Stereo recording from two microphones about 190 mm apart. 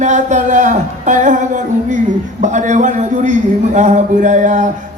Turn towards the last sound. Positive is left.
turn(degrees=-40)  # may be behind; listen again after turning